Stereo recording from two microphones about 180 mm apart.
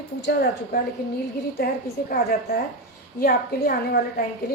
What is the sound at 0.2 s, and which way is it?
A woman's voice, 60° left (ahead or behind).